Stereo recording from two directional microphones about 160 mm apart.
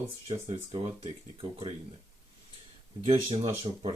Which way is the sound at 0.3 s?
40° right (ahead or behind).